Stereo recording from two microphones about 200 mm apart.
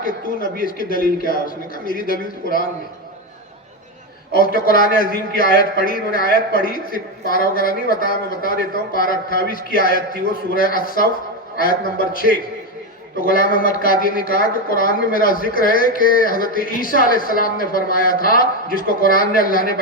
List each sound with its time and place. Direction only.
0.0 s a woman's voice: 45° left (ahead or behind)
4.3 s a woman's voice: 45° left (ahead or behind)